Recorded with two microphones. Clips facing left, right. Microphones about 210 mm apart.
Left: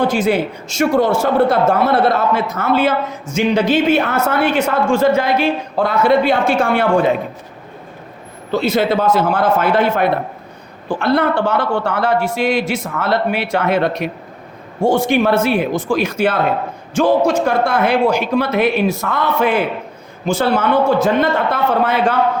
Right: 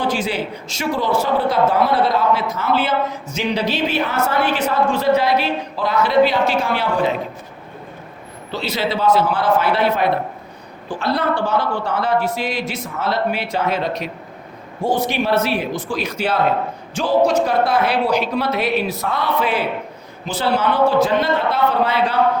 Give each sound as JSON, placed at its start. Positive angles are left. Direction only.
{"t": 0.0, "sound": "a woman's voice", "side_deg": 50}
{"t": 8.5, "sound": "a woman's voice", "side_deg": 50}
{"t": 11.8, "sound": "speech", "side_deg": 70}
{"t": 12.8, "sound": "a woman's voice", "side_deg": 55}